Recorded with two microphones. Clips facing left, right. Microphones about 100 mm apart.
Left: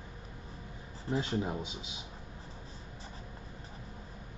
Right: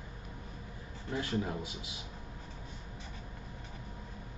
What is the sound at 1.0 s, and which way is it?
Speech, 25° left (ahead or behind).